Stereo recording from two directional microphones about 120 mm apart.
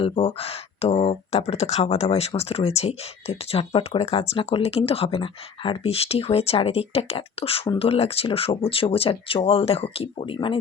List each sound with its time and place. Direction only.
0.0 s speech: 50° left (ahead or behind)